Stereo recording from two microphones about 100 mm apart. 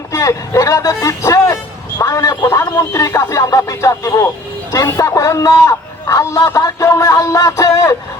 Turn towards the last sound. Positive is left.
turn(degrees=30)  # may be behind; listen again after turning